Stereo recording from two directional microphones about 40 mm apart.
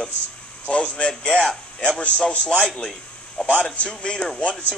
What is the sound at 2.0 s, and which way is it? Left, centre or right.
Speech, left.